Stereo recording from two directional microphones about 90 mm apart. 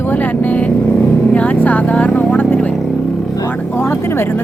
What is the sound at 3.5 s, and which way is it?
Vehicle, 25° left (ahead or behind).